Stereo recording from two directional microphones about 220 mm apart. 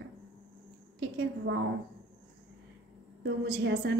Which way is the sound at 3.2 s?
50° right (ahead or behind).